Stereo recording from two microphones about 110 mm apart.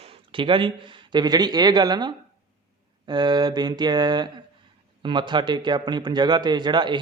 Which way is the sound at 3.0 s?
40° right (ahead or behind).